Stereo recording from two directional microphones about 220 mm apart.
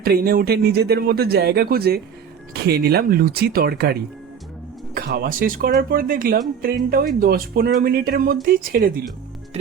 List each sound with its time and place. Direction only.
0.0 s speech: 45° right (ahead or behind)
4.9 s speech: 45° right (ahead or behind)